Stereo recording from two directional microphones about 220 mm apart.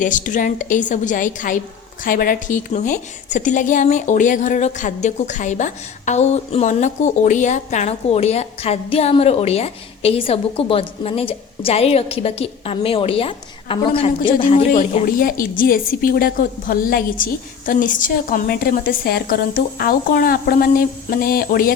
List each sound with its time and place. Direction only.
0.0 s a woman's voice: 35° left (ahead or behind)
14.7 s a woman's voice: 40° left (ahead or behind)